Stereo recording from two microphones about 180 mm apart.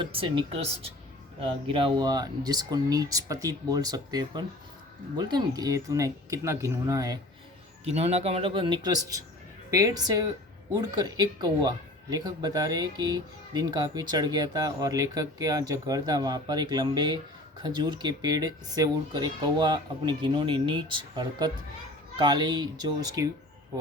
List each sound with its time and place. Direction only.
0.0 s speech: 30° right (ahead or behind)
7.9 s speech: 35° right (ahead or behind); by 23.3 s 20° right (ahead or behind)